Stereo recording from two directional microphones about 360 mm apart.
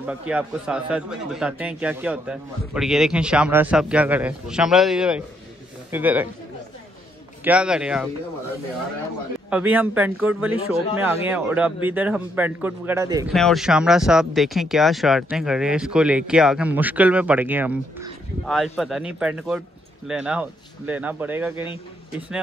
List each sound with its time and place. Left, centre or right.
0.0 s a man's voice: centre
7.4 s speech: centre
9.5 s speech: centre